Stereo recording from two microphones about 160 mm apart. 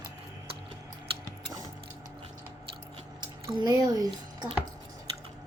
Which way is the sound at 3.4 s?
25° right (ahead or behind).